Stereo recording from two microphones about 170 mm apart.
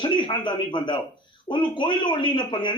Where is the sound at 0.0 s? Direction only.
25° left (ahead or behind).